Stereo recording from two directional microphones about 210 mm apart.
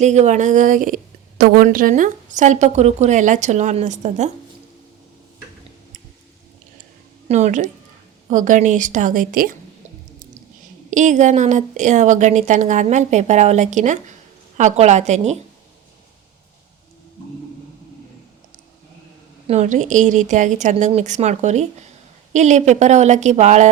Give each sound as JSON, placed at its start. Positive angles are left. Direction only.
{"t": 0.0, "sound": "a woman's voice", "side_deg": -35}
{"t": 7.3, "sound": "a woman's voice", "side_deg": -35}
{"t": 10.9, "sound": "a woman's voice", "side_deg": -35}
{"t": 19.5, "sound": "a woman's voice", "side_deg": -35}